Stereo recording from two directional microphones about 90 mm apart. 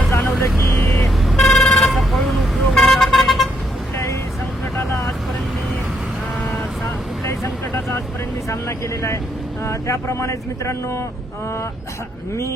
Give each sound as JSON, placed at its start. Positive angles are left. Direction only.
{"t": 0.1, "sound": "vehicle", "side_deg": 30}
{"t": 1.0, "sound": "vehicle", "side_deg": 5}
{"t": 8.4, "sound": "vehicle", "side_deg": 35}
{"t": 9.6, "sound": "speech", "side_deg": 35}